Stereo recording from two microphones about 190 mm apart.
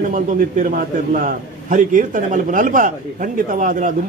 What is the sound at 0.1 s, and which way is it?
A man's voice, 45° right (ahead or behind).